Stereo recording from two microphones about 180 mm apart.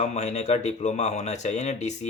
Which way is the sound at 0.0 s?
40° left (ahead or behind).